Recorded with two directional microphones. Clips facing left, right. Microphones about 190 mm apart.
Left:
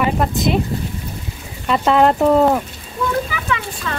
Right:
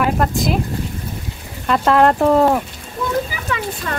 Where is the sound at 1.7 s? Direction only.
Centre (ahead or behind).